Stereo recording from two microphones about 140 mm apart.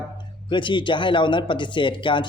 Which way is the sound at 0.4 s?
35° left (ahead or behind).